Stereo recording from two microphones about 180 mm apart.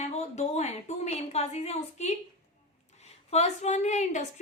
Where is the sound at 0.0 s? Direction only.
40° left (ahead or behind).